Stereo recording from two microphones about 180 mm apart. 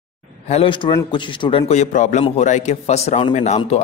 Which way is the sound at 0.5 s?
30° left (ahead or behind).